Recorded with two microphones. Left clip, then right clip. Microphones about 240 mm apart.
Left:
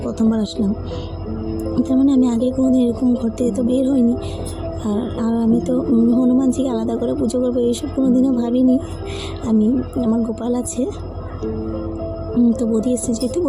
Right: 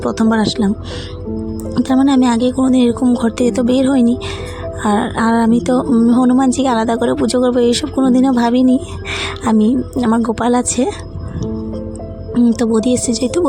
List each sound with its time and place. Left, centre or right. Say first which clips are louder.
0.0 s speech: right 6 dB; right
1.7 s speech: right 4 dB; right
12.4 s speech: right 4 dB; right